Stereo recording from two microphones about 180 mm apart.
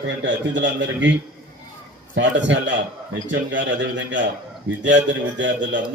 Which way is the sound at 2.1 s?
90° right.